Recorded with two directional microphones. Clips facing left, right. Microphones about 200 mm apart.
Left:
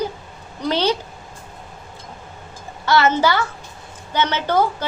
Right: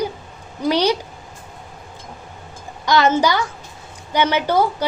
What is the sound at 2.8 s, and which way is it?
A woman's voice, 15° right (ahead or behind).